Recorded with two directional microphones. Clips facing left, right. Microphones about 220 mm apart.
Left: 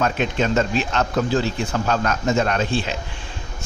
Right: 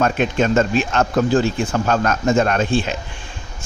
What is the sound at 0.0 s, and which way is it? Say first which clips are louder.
A man's voice: right 3 dB; 50° right (ahead or behind).